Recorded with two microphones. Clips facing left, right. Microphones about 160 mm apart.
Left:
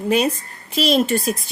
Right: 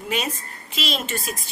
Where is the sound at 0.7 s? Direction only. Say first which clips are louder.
Left 11 dB; 40° left (ahead or behind).